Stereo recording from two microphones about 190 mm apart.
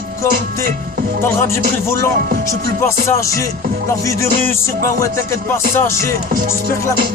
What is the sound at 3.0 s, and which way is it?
Music, 15° left (ahead or behind).